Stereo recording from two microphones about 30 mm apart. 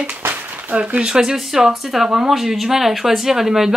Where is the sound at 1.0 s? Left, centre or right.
Right.